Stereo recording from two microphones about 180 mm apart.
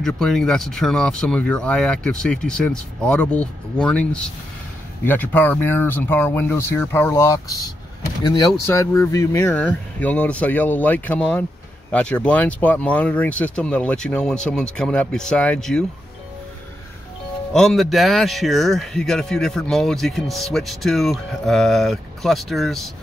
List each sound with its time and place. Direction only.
0.0 s speech: 5° left (ahead or behind)
9.5 s speech: 5° left (ahead or behind)
17.5 s speech: centre (ahead or behind)